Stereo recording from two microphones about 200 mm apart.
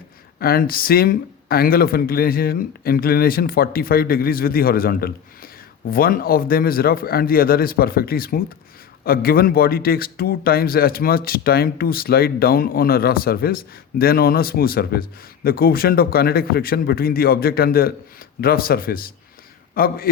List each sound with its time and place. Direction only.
0.3 s speech: 50° left (ahead or behind)